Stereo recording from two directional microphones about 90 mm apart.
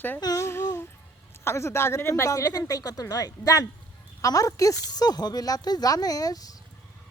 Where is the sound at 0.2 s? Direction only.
45° left (ahead or behind).